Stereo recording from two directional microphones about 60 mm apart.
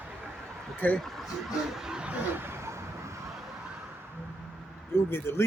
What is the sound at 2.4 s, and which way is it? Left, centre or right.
Vehicle, right.